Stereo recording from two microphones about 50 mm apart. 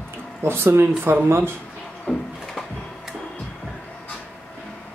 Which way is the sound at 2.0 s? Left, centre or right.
Centre.